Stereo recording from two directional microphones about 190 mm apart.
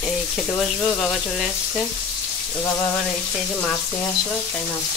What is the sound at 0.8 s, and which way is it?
Speech, centre (ahead or behind).